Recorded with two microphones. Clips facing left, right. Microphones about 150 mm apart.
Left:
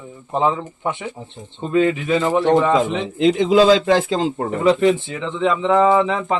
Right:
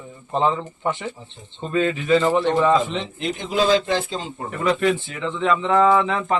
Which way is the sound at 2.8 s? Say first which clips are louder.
Left 7 dB; 90° left.